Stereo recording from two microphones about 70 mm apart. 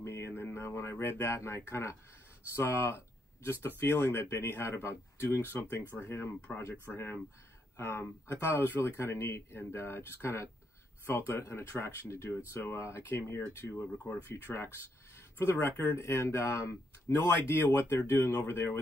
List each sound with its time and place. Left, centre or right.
0.0 s a sound: left
0.4 s speech: left
13.9 s speech: centre
14.2 s speech: left